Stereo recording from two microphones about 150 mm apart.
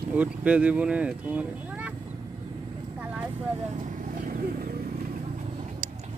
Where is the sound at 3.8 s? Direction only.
75° right (ahead or behind).